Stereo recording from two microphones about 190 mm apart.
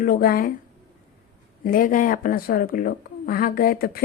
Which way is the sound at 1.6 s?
45° left (ahead or behind).